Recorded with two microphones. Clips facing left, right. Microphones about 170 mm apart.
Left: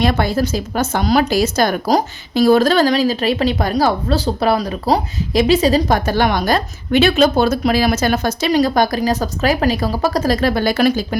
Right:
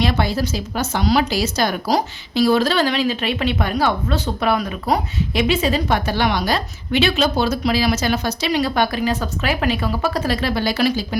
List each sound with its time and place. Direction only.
0.0 s a woman's voice: 50° left (ahead or behind)